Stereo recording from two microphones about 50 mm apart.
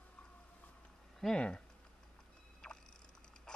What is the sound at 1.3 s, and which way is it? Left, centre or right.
Speech, centre.